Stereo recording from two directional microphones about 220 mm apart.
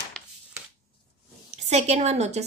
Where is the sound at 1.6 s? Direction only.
30° right (ahead or behind).